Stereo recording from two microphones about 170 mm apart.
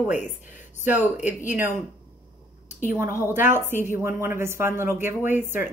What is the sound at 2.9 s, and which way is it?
A woman's voice, 15° right (ahead or behind).